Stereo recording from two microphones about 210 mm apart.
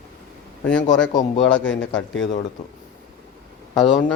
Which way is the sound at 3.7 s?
20° left (ahead or behind).